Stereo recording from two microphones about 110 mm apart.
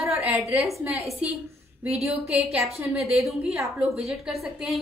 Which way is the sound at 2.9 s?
5° right (ahead or behind).